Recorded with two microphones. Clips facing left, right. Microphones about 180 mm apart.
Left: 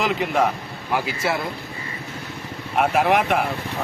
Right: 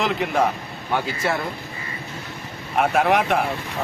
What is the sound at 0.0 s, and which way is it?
Speech, centre (ahead or behind).